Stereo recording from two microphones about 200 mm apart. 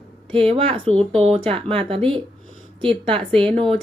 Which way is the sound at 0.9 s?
30° right (ahead or behind).